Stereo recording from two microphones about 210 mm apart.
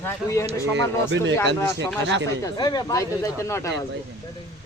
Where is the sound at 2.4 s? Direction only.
20° left (ahead or behind).